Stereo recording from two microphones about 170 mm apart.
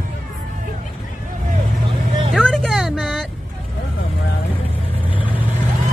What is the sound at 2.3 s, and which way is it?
Music, 5° left (ahead or behind).